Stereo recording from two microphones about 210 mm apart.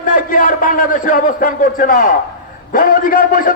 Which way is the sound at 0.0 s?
40° left (ahead or behind).